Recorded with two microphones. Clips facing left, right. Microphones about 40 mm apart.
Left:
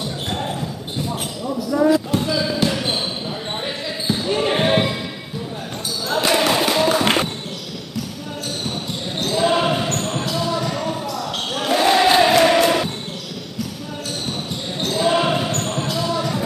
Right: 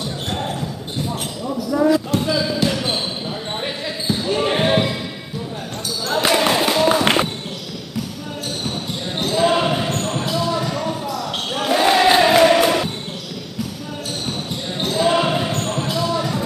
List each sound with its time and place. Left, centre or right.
1.7 s basketball bounce: centre
4.1 s basketball bounce: centre
6.0 s basketball bounce: centre
9.2 s basketball bounce: centre
14.8 s basketball bounce: centre